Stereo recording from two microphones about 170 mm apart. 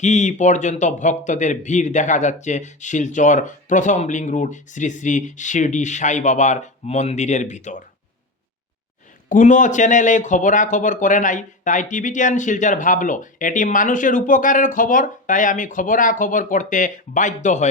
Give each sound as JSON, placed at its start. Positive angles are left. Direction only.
{"t": 0.0, "sound": "a man's voice", "side_deg": 45}
{"t": 9.3, "sound": "a man's voice", "side_deg": 50}